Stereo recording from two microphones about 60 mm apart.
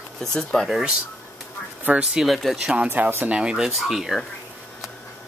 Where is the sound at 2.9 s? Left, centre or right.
Right.